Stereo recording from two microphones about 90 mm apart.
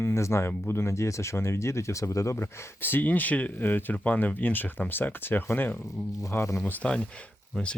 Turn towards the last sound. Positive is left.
turn(degrees=10)  # may be behind; listen again after turning